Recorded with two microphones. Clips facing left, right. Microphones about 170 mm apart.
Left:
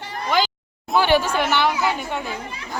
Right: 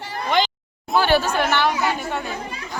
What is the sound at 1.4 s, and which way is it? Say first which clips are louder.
Chatter: even; 15° left (ahead or behind).